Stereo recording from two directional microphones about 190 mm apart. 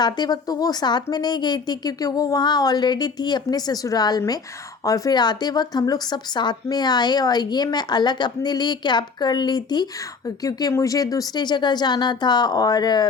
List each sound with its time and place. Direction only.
0.0 s speech: 20° left (ahead or behind)